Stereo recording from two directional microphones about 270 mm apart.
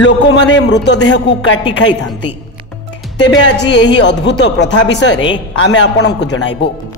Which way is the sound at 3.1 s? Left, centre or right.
Left.